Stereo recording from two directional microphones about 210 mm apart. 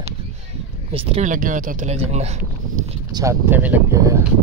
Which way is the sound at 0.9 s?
30° right (ahead or behind).